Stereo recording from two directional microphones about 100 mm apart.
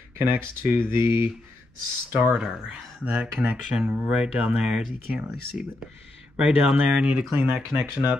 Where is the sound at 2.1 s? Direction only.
10° right (ahead or behind).